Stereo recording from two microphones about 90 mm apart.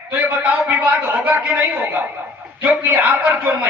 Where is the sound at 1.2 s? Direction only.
15° right (ahead or behind).